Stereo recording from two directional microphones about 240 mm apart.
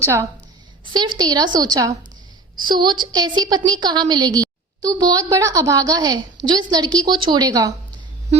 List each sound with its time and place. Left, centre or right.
0.0 s a woman's voice: centre